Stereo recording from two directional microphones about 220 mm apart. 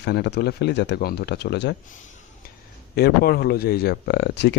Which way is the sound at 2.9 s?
45° left (ahead or behind).